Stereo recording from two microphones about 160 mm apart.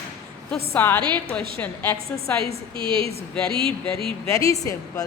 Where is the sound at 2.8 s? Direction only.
35° right (ahead or behind).